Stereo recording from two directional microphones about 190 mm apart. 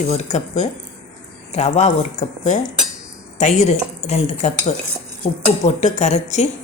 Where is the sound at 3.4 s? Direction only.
35° left (ahead or behind).